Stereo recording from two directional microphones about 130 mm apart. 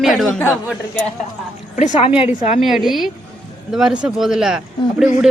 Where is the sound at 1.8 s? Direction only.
65° left (ahead or behind).